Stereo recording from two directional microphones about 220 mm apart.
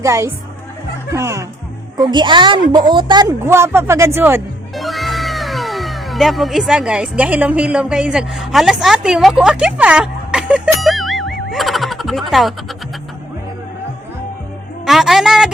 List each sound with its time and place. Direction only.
0.0 s a woman's voice: 15° right (ahead or behind)
4.7 s speech: centre (ahead or behind)
11.5 s a sound: centre (ahead or behind)
14.8 s a woman's voice: centre (ahead or behind)